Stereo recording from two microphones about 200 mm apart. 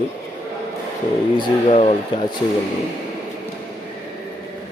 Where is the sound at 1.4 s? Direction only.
25° left (ahead or behind).